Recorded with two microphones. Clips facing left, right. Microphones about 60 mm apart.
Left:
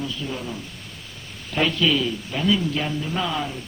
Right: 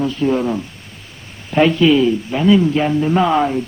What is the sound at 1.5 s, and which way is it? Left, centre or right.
A man's voice, right.